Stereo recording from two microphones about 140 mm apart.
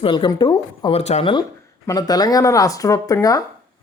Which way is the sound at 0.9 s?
50° left (ahead or behind).